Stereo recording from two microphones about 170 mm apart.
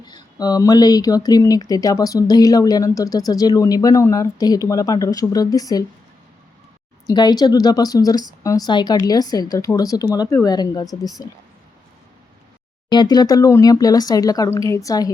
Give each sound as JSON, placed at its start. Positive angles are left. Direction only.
{"t": 0.3, "sound": "speech", "side_deg": 20}
{"t": 7.1, "sound": "speech", "side_deg": 25}
{"t": 12.9, "sound": "speech", "side_deg": 25}